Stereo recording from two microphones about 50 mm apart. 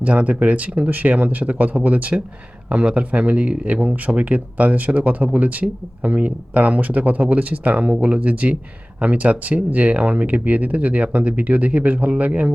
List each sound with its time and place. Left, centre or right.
0.0 s speech: right